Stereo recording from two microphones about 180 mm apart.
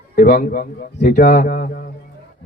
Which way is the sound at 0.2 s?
55° left (ahead or behind).